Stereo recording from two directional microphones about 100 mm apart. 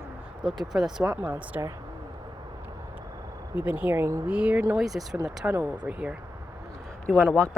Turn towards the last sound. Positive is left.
turn(degrees=10)  # may be behind; listen again after turning